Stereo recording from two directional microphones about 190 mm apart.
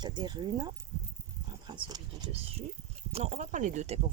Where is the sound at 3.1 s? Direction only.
35° right (ahead or behind).